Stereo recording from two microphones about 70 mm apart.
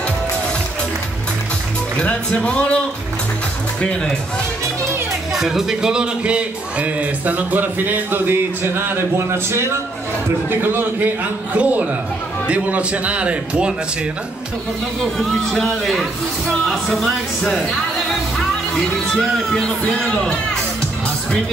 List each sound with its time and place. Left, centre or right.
2.0 s speech: centre
5.3 s a man's voice: centre; by 9.0 s right
10.6 s a man's voice: right
15.1 s speech: centre
19.1 s speech: centre